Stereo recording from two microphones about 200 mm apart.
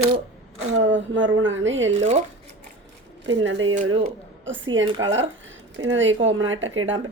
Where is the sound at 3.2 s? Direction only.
70° right (ahead or behind).